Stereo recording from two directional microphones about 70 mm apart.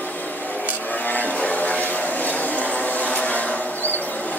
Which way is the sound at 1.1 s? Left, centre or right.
Left.